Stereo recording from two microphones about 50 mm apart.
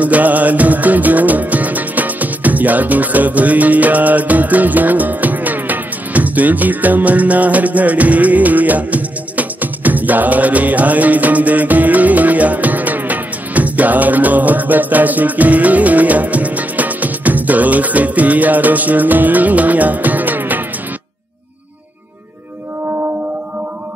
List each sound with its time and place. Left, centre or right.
0.0 s music: right